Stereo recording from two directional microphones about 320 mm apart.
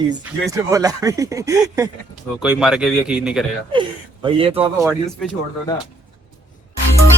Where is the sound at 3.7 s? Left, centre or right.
Centre.